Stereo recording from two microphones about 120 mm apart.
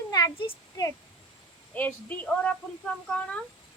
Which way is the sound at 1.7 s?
15° left (ahead or behind).